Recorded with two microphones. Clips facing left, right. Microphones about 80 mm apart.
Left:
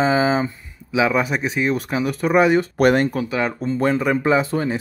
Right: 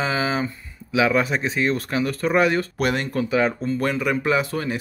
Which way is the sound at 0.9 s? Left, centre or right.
Centre.